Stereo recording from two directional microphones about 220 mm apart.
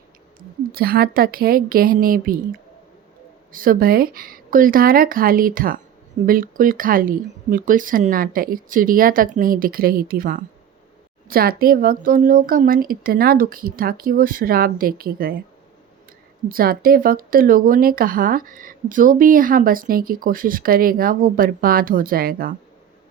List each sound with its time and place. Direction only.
0.8 s speech: 40° right (ahead or behind)
16.5 s speech: 40° right (ahead or behind)